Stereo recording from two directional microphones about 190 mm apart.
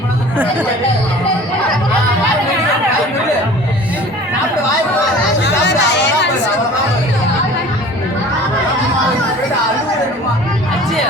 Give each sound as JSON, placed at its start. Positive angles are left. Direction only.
{"t": 5.4, "sound": "chatter", "side_deg": 65}